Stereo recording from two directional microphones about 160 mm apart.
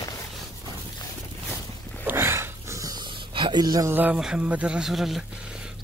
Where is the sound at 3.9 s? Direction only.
10° right (ahead or behind).